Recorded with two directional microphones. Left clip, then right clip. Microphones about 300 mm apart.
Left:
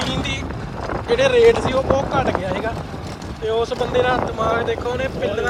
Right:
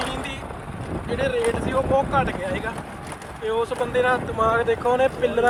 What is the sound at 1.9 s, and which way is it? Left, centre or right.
Speech, centre.